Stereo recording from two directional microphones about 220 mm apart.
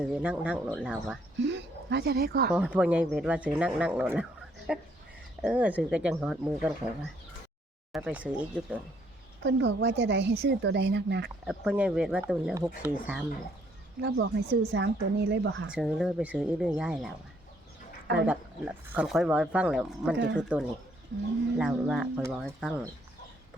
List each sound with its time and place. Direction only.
0.0 s speech: 5° right (ahead or behind)
1.5 s speech: 50° right (ahead or behind)
2.5 s speech: 5° right (ahead or behind)
9.4 s speech: 55° right (ahead or behind)
11.4 s speech: 5° right (ahead or behind)
14.0 s speech: 50° right (ahead or behind)
15.7 s speech: 5° right (ahead or behind)
18.3 s speech: 5° right (ahead or behind)